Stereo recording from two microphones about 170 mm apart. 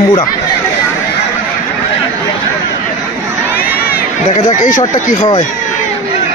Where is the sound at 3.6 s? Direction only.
60° left (ahead or behind).